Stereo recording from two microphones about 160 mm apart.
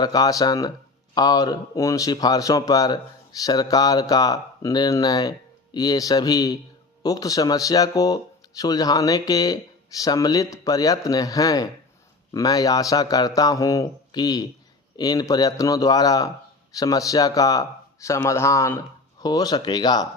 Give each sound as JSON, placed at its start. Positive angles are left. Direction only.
{"t": 0.0, "sound": "speech", "side_deg": 25}